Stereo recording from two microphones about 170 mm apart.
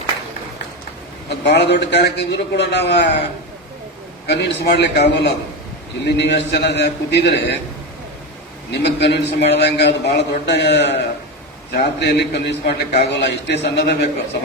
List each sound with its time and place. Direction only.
1.5 s a man's voice: 80° left
4.3 s a man's voice: 75° left (ahead or behind)
8.7 s a man's voice: 80° left
11.7 s a man's voice: 75° left (ahead or behind)